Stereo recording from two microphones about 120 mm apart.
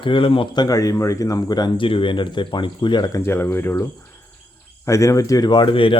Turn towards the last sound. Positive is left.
turn(degrees=45)  # may be behind; listen again after turning